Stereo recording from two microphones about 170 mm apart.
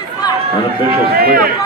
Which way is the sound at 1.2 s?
60° right (ahead or behind).